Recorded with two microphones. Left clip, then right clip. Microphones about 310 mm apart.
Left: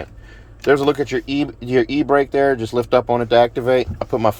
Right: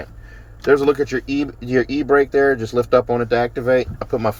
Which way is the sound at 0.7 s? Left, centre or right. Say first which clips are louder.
Right 2 dB; centre.